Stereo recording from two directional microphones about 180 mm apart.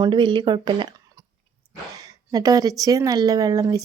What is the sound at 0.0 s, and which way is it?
Speech, 25° right (ahead or behind).